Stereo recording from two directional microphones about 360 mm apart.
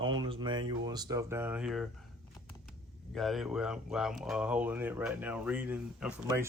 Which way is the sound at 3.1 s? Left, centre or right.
Centre.